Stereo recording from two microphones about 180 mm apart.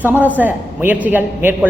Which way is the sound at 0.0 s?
10° right (ahead or behind).